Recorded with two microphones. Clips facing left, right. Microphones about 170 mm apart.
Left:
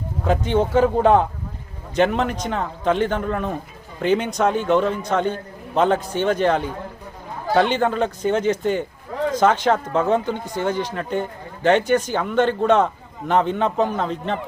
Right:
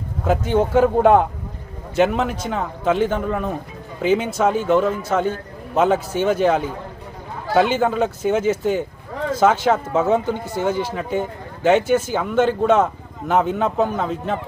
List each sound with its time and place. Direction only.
0.3 s speech: 10° right (ahead or behind)